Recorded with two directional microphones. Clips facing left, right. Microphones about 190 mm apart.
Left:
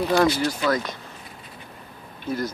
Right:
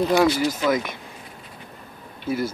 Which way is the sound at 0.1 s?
10° right (ahead or behind).